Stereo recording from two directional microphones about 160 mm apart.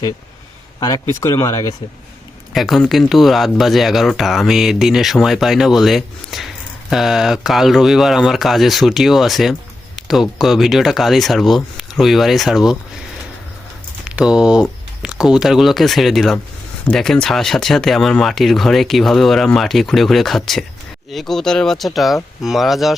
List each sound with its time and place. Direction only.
0.8 s speech: 25° left (ahead or behind)
2.5 s speech: centre (ahead or behind)
14.2 s speech: 5° right (ahead or behind)